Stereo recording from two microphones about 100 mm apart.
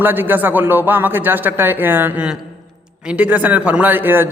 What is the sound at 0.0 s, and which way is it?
A man's voice, 20° right (ahead or behind).